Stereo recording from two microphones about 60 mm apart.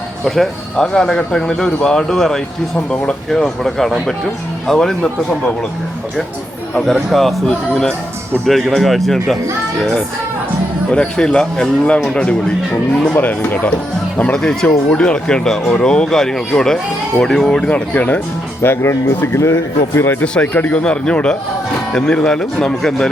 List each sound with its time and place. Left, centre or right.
0.3 s speech: centre
2.7 s a man's voice: left
3.2 s a man's voice: centre
6.7 s a man's voice: centre
10.9 s speech: centre
13.1 s speech: left
14.3 s speech: centre
17.7 s a man's voice: left
18.6 s speech: left
20.2 s a man's voice: centre